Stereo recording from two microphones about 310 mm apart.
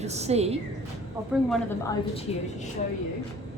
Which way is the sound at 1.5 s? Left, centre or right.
Centre.